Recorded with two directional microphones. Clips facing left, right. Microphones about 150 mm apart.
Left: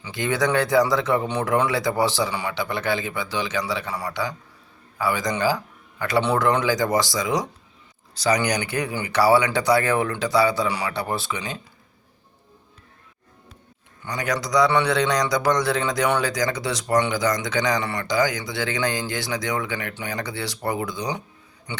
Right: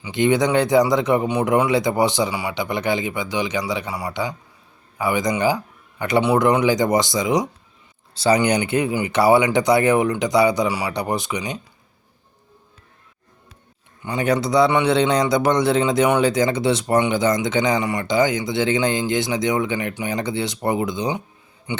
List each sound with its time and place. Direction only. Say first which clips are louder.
0.0 s a man's voice: right 5 dB; 20° right (ahead or behind)
14.0 s a man's voice: right 6 dB; 25° right (ahead or behind)